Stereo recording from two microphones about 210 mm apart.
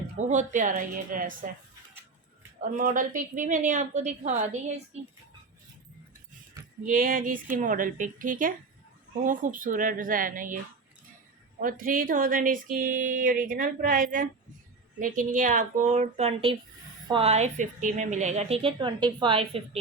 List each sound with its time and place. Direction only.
0.2 s speech: 35° right (ahead or behind)
2.7 s speech: 40° right (ahead or behind)
6.8 s speech: 40° right (ahead or behind)
11.6 s speech: 40° right (ahead or behind)